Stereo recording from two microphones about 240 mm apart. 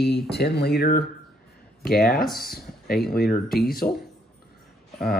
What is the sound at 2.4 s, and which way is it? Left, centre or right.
Speech, left.